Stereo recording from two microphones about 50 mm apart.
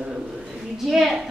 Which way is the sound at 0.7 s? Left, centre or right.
Centre.